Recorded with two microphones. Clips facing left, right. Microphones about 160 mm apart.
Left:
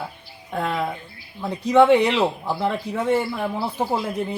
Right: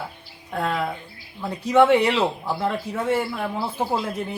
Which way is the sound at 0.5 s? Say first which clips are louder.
Even; 15° left (ahead or behind).